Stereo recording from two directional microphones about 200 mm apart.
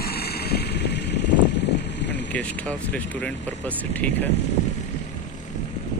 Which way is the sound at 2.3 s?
5° left (ahead or behind).